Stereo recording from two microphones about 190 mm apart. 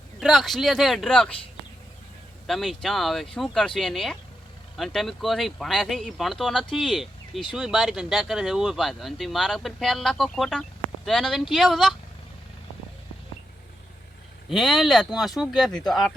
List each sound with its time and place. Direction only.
0.2 s speech: centre (ahead or behind)
2.5 s speech: centre (ahead or behind)
14.5 s speech: centre (ahead or behind)